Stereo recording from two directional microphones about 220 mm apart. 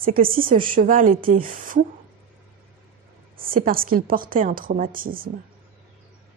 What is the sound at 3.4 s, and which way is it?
Speech, 40° right (ahead or behind).